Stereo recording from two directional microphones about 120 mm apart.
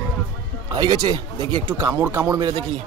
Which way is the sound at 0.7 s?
35° right (ahead or behind).